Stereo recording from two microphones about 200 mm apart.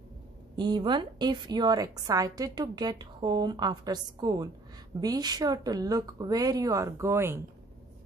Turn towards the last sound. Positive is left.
turn(degrees=-15)  # may be behind; listen again after turning